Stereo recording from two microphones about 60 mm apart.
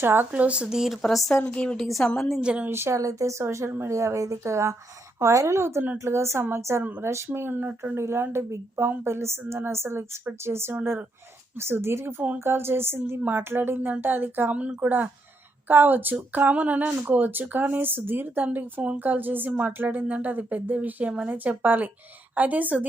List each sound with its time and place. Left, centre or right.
0.0 s speech: right
0.3 s speech: right
1.0 s speech: centre
1.5 s a woman's voice: centre
1.8 s a woman's voice: centre
2.4 s speech: centre
2.6 s a woman's voice: right
3.0 s a woman's voice: right
7.3 s a woman's voice: right
14.5 s speech: right